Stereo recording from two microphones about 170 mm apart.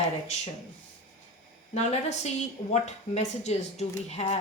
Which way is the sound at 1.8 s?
40° left (ahead or behind).